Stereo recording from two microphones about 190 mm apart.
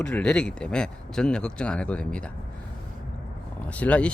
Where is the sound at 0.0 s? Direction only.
5° left (ahead or behind).